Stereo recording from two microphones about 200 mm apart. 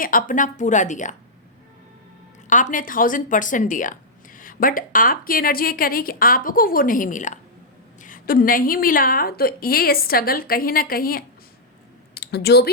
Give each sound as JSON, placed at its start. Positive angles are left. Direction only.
{"t": 0.0, "sound": "a woman's voice", "side_deg": 45}
{"t": 2.5, "sound": "a woman's voice", "side_deg": 40}